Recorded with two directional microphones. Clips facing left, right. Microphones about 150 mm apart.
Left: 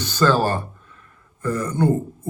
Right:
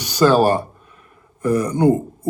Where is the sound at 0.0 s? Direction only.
15° right (ahead or behind).